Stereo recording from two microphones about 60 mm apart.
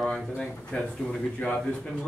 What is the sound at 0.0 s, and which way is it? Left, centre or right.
A man's voice, centre.